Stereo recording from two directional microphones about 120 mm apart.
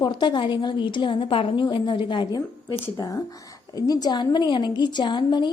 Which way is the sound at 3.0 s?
30° left (ahead or behind).